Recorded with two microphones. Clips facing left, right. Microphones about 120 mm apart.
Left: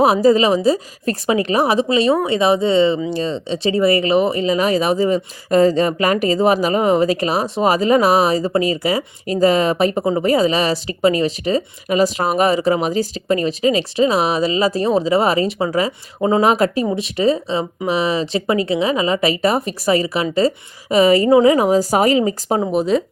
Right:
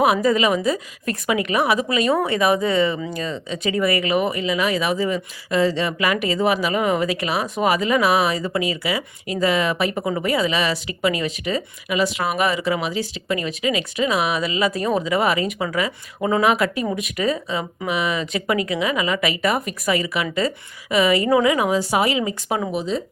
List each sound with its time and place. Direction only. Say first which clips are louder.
0.0 s speech: left 5 dB; 35° left (ahead or behind)